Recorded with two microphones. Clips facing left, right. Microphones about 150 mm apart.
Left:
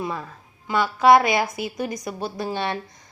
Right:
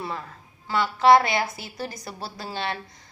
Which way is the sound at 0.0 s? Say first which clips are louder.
Left 4 dB; 15° left (ahead or behind).